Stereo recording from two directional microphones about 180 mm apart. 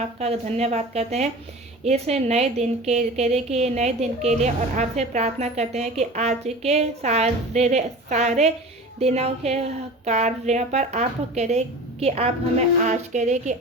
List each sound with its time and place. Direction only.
0.2 s a woman's voice: 35° right (ahead or behind)